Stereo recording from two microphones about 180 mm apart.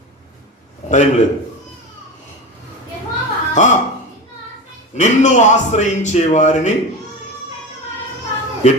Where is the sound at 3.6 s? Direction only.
45° left (ahead or behind).